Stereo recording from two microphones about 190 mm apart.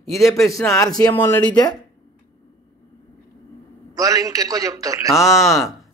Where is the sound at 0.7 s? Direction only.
20° left (ahead or behind).